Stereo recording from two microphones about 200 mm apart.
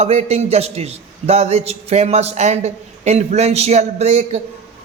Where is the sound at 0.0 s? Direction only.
35° right (ahead or behind).